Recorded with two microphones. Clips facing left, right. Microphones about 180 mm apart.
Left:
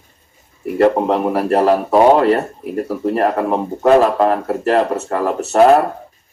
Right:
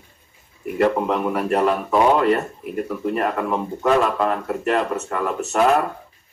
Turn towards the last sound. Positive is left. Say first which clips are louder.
# left 7 dB
turn(degrees=40)  # may be behind; listen again after turning